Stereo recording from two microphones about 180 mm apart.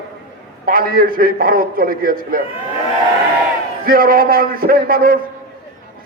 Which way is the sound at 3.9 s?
50° right (ahead or behind).